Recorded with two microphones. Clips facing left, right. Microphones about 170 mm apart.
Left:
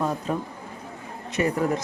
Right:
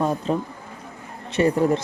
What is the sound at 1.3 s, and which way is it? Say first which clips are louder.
Speech: right 5 dB; 30° right (ahead or behind).